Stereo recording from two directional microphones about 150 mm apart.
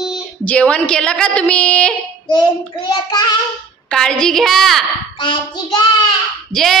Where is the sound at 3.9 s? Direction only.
5° left (ahead or behind).